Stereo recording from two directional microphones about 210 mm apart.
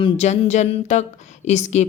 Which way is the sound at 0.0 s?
30° left (ahead or behind).